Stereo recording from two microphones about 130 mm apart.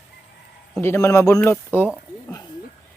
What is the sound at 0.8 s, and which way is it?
A man's voice, 20° left (ahead or behind).